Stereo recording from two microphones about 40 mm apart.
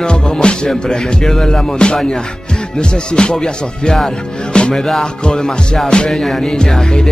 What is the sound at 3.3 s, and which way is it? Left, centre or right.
Music, centre.